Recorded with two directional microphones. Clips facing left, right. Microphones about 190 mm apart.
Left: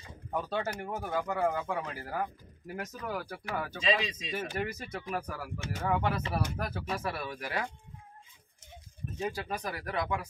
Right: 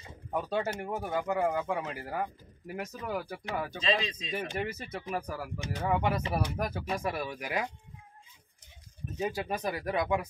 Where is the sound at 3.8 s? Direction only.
5° left (ahead or behind).